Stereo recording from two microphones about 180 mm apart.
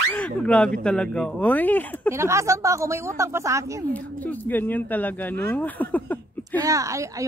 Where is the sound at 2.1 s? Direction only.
15° right (ahead or behind).